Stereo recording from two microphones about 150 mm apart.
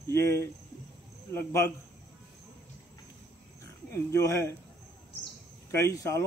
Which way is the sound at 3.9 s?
20° left (ahead or behind).